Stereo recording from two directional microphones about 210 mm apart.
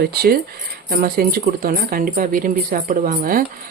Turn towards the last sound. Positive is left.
turn(degrees=-40)  # may be behind; listen again after turning